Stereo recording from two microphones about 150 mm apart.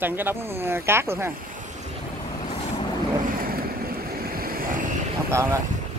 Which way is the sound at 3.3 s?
75° right (ahead or behind).